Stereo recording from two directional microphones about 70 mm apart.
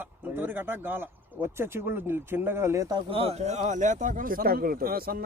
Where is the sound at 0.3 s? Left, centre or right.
Right.